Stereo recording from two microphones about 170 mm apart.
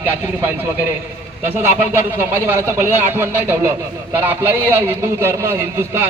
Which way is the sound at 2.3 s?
10° right (ahead or behind).